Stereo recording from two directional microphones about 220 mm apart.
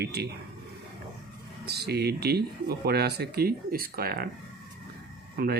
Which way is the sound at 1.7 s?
45° right (ahead or behind).